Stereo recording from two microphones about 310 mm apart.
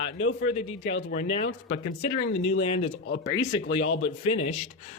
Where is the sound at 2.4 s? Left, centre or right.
Centre.